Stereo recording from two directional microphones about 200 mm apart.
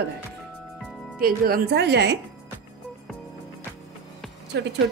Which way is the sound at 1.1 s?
45° right (ahead or behind).